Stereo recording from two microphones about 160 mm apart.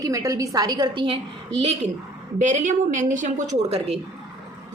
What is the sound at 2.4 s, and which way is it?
A woman's voice, 50° right (ahead or behind).